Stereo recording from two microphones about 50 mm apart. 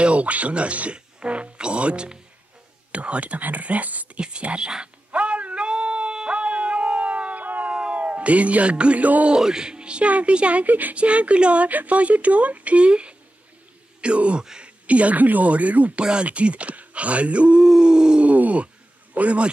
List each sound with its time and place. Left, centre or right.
0.0 s speech: right
4.2 s a sound: right
7.7 s speech: right
9.3 s speech: centre
14.9 s speech: right
17.6 s a sound: centre
18.3 s speech: right